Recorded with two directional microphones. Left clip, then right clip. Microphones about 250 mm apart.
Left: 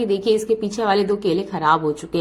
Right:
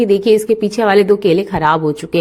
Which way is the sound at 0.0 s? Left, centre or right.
Right.